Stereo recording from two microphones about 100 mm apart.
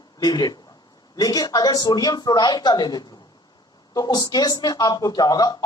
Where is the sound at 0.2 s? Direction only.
45° left (ahead or behind).